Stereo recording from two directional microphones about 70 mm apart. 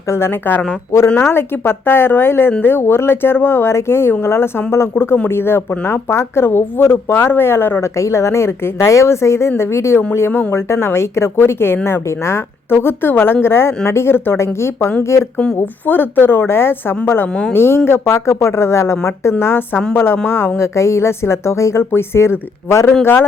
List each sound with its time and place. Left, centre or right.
0.1 s speech: left
7.9 s speech: left
15.5 s speech: left
20.7 s speech: left